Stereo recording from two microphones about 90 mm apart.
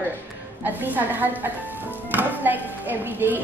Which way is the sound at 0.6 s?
20° right (ahead or behind).